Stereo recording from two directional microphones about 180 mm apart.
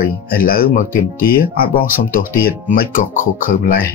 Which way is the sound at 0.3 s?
55° left (ahead or behind).